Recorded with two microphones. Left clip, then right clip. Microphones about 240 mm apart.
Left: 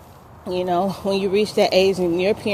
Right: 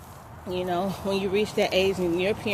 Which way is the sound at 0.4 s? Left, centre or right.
Left.